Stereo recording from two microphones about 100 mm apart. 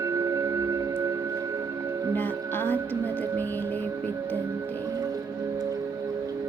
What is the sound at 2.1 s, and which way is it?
Music, 20° left (ahead or behind).